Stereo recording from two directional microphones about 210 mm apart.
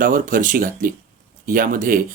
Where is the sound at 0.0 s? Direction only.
40° right (ahead or behind).